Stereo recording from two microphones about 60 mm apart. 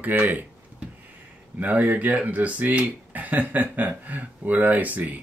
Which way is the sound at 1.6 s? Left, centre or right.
Right.